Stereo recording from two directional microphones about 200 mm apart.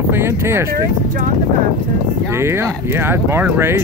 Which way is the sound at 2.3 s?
10° right (ahead or behind).